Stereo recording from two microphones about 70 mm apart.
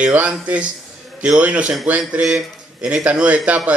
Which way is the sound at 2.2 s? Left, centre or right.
Centre.